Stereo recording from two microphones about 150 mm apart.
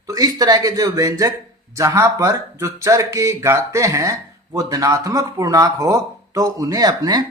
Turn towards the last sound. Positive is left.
turn(degrees=-25)  # may be behind; listen again after turning